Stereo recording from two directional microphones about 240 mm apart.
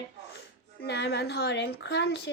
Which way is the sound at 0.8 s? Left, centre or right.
Left.